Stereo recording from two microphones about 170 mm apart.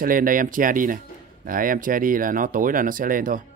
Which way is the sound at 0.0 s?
55° right (ahead or behind).